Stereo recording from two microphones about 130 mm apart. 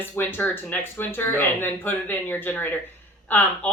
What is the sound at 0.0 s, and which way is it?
Speech, 15° left (ahead or behind).